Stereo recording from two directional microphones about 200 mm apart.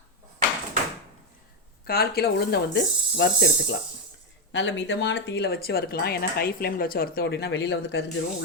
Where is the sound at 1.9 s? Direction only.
50° left (ahead or behind).